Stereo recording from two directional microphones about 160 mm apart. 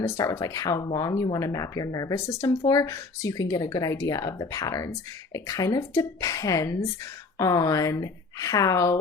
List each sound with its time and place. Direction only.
0.0 s speech: 20° left (ahead or behind)